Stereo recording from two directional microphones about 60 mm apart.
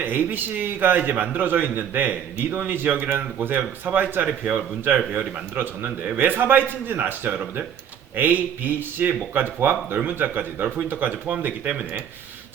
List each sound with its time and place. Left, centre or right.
0.0 s a man's voice: right